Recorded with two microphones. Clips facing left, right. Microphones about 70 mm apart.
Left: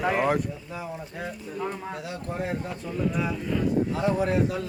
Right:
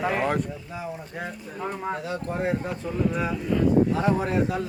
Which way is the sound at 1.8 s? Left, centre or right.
Right.